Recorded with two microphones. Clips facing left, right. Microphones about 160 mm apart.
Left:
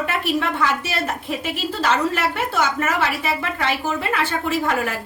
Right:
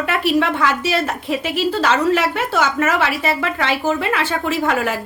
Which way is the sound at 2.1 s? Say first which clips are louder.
Right 3 dB; 90° right.